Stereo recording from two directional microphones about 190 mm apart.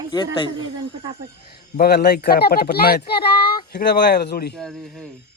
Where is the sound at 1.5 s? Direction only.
55° left (ahead or behind).